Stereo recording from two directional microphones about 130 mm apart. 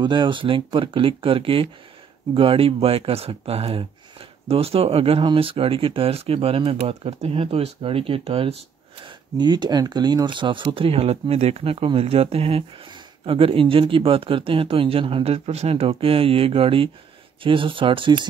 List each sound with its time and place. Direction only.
0.0 s speech: 35° right (ahead or behind)
9.0 s speech: 35° right (ahead or behind)